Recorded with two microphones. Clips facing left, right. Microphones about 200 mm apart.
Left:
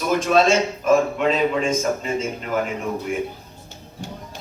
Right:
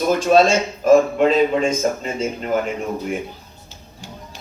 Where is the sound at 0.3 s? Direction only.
40° right (ahead or behind).